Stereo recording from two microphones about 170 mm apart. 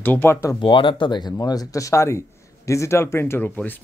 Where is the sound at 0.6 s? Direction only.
30° left (ahead or behind).